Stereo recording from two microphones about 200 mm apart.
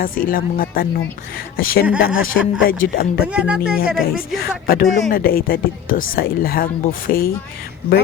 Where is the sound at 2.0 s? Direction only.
75° left (ahead or behind).